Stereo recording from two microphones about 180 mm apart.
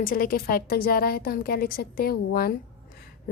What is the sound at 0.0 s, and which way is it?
A woman's voice, 50° left (ahead or behind).